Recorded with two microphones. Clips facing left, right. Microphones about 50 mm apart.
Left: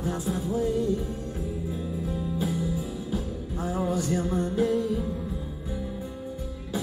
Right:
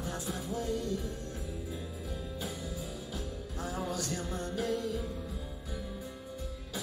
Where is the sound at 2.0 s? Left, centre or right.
Left.